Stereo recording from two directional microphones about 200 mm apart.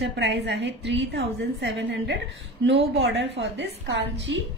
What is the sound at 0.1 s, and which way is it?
A woman's voice, 60° right (ahead or behind).